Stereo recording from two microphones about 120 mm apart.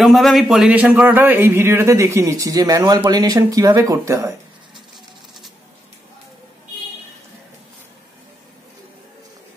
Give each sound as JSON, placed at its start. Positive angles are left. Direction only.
{"t": 0.0, "sound": "a man's voice", "side_deg": 0}